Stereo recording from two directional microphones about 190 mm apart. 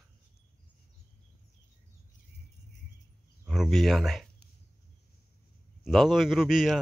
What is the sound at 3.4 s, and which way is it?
Speech, centre (ahead or behind).